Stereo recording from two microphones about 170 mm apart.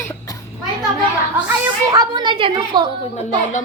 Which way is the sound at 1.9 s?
25° right (ahead or behind).